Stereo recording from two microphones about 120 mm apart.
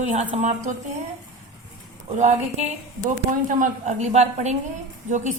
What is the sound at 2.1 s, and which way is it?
A woman's voice, 70° right (ahead or behind).